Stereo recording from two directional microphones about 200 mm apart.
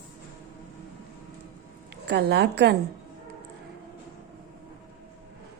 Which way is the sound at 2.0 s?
55° right (ahead or behind).